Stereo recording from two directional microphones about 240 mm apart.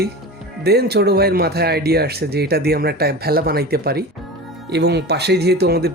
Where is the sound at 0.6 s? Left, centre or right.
Right.